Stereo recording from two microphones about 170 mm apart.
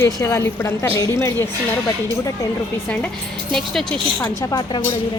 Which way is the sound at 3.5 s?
5° left (ahead or behind).